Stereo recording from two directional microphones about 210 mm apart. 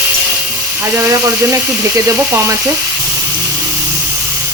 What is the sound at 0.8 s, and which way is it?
Speech, 15° right (ahead or behind).